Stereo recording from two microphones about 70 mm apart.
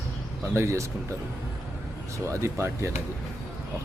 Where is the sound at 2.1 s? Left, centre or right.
Right.